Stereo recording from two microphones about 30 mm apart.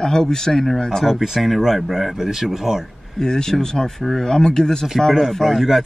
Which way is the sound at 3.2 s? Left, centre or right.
Left.